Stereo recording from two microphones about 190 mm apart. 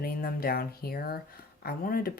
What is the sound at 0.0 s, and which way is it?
Speech, 50° left (ahead or behind).